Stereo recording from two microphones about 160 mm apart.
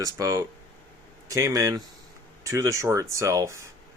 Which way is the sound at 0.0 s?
20° right (ahead or behind).